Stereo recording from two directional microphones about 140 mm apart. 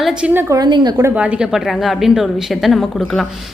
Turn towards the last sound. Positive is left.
turn(degrees=0)  # may be behind; listen again after turning